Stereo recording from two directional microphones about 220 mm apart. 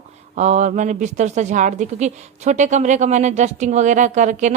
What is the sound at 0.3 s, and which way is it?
Speech, 30° right (ahead or behind).